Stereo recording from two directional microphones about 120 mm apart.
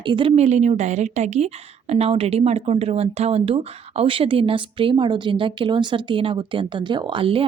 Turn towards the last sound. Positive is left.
turn(degrees=-50)  # may be behind; listen again after turning